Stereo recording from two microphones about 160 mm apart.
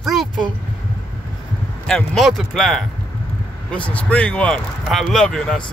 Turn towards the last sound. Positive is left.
turn(degrees=5)  # may be behind; listen again after turning